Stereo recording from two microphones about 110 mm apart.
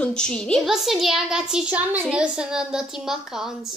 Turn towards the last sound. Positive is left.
turn(degrees=-5)  # may be behind; listen again after turning